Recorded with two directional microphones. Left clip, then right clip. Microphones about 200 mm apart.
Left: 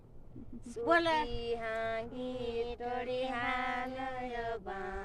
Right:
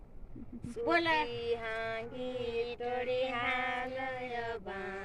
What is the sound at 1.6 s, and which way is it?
Music, 30° left (ahead or behind).